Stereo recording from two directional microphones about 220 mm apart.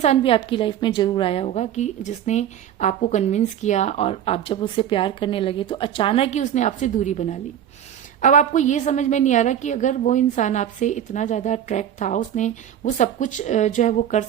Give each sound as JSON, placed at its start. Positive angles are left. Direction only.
{"t": 0.0, "sound": "a woman's voice", "side_deg": 25}